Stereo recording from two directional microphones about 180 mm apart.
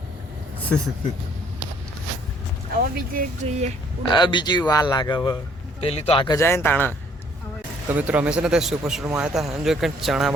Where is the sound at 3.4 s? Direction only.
40° right (ahead or behind).